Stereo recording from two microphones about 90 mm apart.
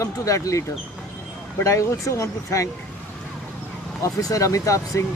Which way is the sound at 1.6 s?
35° left (ahead or behind).